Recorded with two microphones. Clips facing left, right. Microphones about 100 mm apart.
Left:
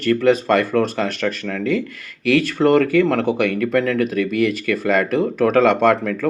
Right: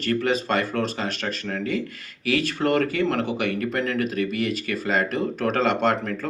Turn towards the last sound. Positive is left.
turn(degrees=55)  # may be behind; listen again after turning